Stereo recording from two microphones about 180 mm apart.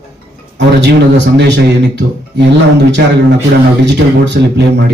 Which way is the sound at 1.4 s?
75° right (ahead or behind).